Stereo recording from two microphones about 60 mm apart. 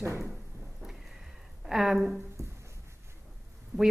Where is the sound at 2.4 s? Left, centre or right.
Right.